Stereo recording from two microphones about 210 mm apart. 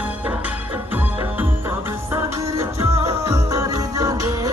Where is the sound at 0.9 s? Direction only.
10° right (ahead or behind).